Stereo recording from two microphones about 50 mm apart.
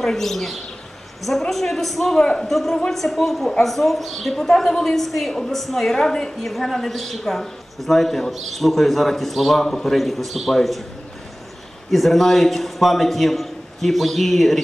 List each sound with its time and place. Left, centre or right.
0.0 s a woman's voice: centre
2.1 s a man's voice: centre
2.4 s a woman's voice: centre
11.9 s a man's voice: centre